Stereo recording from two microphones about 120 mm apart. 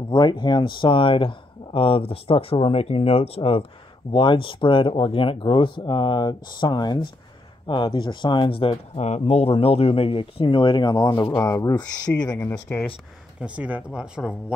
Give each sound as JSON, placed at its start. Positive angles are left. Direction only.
{"t": 0.1, "sound": "speech", "side_deg": 35}
{"t": 4.1, "sound": "speech", "side_deg": 45}
{"t": 8.9, "sound": "speech", "side_deg": 65}
{"t": 12.4, "sound": "speech", "side_deg": 20}
{"t": 13.4, "sound": "speech", "side_deg": -10}